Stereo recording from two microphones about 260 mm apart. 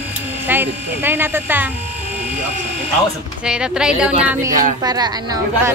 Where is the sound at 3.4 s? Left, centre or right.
Centre.